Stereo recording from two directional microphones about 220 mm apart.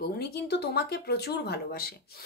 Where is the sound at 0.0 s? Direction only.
45° left (ahead or behind).